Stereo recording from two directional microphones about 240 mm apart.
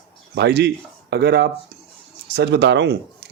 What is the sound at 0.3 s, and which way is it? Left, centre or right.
Speech, right.